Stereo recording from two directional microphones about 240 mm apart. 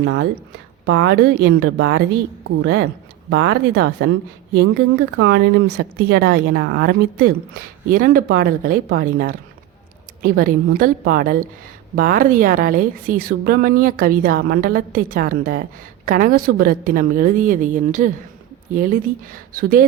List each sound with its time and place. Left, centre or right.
0.0 s speech: right
5.1 s speech: right